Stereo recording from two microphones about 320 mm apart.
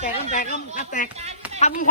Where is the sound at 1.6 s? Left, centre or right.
Left.